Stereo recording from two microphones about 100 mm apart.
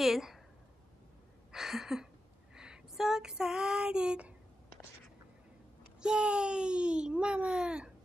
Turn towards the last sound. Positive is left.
turn(degrees=-10)  # may be behind; listen again after turning